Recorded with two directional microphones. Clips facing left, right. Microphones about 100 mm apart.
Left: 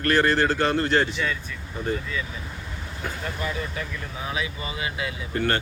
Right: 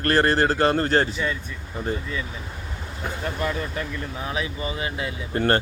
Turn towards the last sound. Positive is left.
turn(degrees=-35)  # may be behind; listen again after turning